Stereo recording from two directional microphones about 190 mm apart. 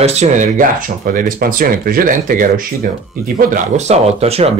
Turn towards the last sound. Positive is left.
turn(degrees=-30)  # may be behind; listen again after turning